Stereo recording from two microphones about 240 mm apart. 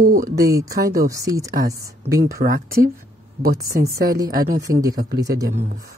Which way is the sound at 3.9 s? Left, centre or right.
Right.